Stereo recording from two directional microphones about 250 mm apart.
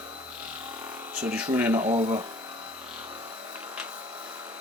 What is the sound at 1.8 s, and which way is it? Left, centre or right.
Speech, right.